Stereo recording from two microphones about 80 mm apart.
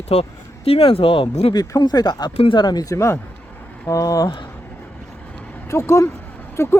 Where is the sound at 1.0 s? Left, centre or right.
Left.